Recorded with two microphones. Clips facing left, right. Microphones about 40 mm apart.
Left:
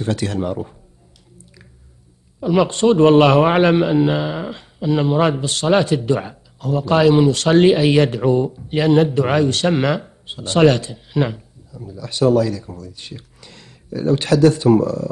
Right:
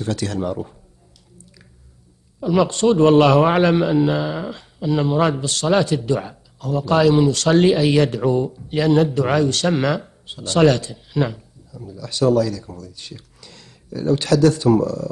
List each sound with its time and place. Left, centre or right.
0.0 s a man's voice: left
2.4 s a man's voice: left